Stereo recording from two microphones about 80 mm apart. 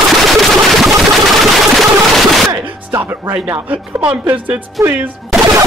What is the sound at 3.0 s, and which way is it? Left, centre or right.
Speech, right.